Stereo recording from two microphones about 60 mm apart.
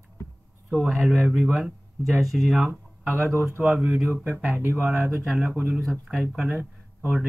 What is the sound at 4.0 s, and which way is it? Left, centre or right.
Speech, right.